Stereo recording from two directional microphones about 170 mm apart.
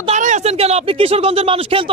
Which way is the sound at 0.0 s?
45° right (ahead or behind).